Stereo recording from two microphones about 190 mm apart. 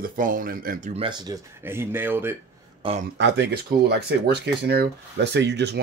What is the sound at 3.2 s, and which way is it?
Speech, 60° right (ahead or behind).